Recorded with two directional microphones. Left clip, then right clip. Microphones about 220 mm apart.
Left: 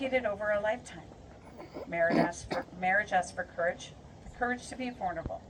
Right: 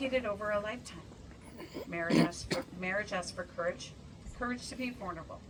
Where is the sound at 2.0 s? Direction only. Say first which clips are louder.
Right 1 dB; 45° right (ahead or behind).